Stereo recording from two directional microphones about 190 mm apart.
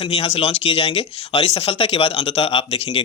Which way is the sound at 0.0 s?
30° left (ahead or behind).